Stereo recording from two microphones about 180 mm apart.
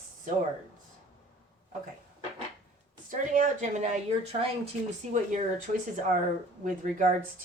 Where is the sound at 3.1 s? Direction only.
45° right (ahead or behind).